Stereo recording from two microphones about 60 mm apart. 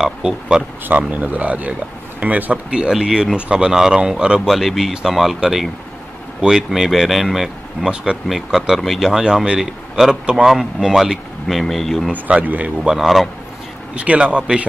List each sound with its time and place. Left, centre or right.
0.0 s speech: centre
0.8 s speech: right
4.5 s speech: centre
11.4 s speech: centre
12.1 s speech: right
12.8 s speech: centre
13.9 s speech: centre